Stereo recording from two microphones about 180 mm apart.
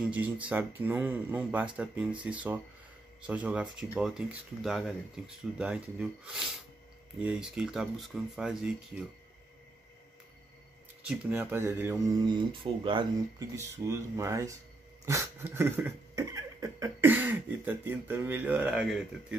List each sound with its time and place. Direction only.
0.0 s speech: 10° right (ahead or behind)
11.1 s speech: 10° right (ahead or behind)
12.3 s speech: 25° right (ahead or behind)
13.6 s speech: 15° right (ahead or behind)